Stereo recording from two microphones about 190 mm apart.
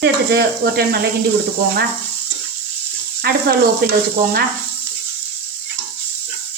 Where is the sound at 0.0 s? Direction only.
60° right (ahead or behind).